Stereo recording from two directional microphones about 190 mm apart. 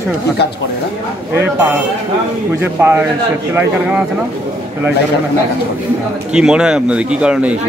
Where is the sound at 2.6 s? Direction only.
10° right (ahead or behind).